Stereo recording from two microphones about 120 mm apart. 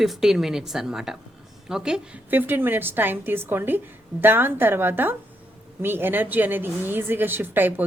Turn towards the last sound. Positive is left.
turn(degrees=-15)  # may be behind; listen again after turning